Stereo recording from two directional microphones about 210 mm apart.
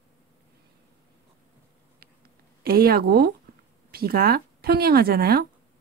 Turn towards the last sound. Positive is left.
turn(degrees=-45)  # may be behind; listen again after turning